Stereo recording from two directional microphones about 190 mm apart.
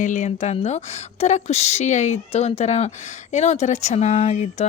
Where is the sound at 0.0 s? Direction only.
40° left (ahead or behind).